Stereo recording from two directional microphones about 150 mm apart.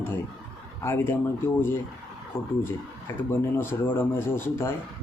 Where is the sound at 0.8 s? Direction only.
15° left (ahead or behind).